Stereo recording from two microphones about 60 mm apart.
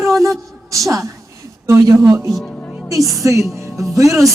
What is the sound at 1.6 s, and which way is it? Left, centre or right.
Speech, right.